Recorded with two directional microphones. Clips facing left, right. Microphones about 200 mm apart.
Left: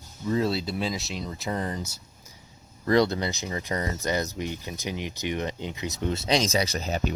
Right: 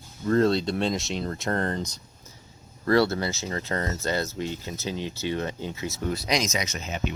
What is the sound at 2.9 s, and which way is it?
Speech, 20° left (ahead or behind).